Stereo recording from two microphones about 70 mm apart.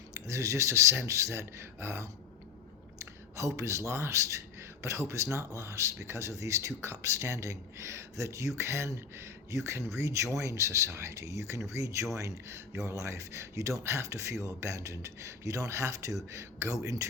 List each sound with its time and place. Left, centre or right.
0.3 s speech: right